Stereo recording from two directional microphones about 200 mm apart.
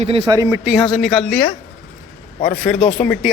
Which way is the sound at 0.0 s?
30° right (ahead or behind).